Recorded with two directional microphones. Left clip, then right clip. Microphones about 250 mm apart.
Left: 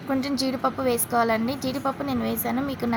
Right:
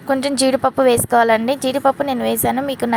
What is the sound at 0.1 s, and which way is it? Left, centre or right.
A woman's voice, right.